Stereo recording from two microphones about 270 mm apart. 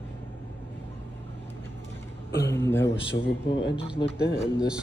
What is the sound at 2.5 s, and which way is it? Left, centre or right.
Speech, centre.